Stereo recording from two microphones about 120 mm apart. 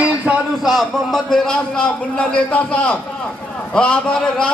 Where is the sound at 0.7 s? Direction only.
Centre (ahead or behind).